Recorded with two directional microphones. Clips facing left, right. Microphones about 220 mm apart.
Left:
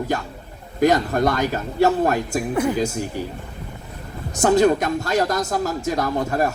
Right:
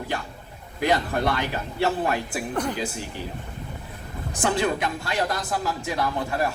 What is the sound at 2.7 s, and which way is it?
Speech, 45° left (ahead or behind).